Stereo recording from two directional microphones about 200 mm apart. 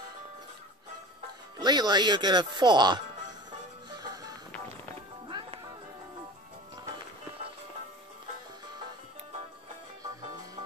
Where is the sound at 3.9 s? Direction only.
20° right (ahead or behind).